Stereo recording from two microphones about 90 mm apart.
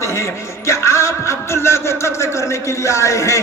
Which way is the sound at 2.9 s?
35° left (ahead or behind).